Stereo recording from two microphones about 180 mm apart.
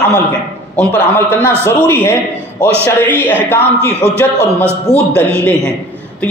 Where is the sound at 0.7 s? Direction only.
10° left (ahead or behind).